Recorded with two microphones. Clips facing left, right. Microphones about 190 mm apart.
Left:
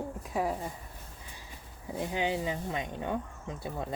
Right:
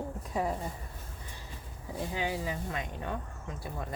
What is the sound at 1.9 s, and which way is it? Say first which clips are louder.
Speech: left 3 dB; 20° left (ahead or behind).